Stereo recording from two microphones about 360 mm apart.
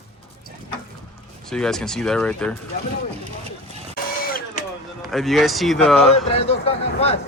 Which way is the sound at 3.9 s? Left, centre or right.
Left.